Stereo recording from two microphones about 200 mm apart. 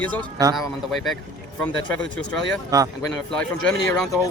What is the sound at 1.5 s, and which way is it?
Speech, 5° left (ahead or behind).